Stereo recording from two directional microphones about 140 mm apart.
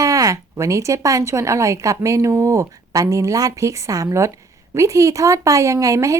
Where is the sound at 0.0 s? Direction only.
25° right (ahead or behind).